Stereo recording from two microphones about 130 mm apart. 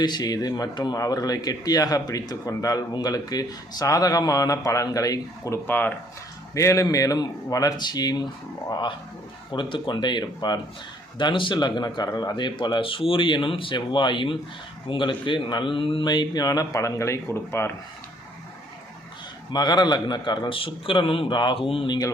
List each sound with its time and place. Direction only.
0.0 s speech: 30° left (ahead or behind)
5.6 s speech: 15° left (ahead or behind); by 8.3 s 30° left (ahead or behind)
9.5 s speech: 40° left (ahead or behind); by 17.7 s 20° left (ahead or behind)
19.5 s speech: 30° left (ahead or behind)